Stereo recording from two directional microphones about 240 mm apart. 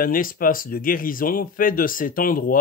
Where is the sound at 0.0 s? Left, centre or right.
Left.